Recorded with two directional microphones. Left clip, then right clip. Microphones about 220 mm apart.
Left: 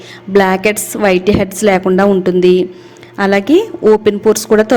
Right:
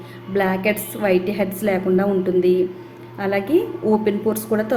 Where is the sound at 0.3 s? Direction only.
45° left (ahead or behind).